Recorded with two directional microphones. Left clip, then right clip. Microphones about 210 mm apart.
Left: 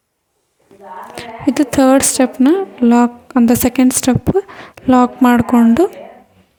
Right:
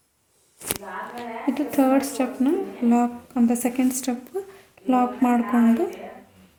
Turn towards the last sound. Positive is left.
turn(degrees=40)  # may be behind; listen again after turning